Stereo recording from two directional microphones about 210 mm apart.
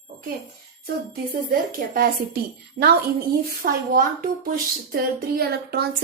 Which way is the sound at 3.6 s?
45° right (ahead or behind).